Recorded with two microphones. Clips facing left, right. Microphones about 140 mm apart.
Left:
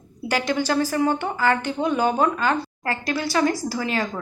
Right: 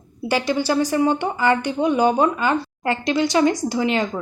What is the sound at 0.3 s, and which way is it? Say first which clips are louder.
A woman's voice: right 2 dB; 10° right (ahead or behind).